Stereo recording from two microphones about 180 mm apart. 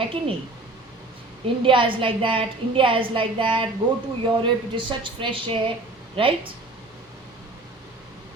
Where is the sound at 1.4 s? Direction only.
30° right (ahead or behind).